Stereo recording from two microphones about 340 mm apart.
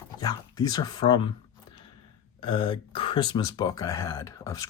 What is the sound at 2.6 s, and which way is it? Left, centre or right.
Speech, centre.